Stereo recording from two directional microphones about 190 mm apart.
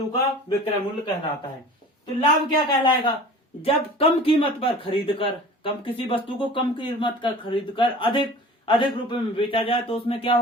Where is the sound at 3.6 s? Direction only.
30° left (ahead or behind).